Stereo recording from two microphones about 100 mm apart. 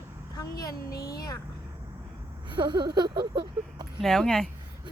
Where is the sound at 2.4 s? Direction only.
50° right (ahead or behind).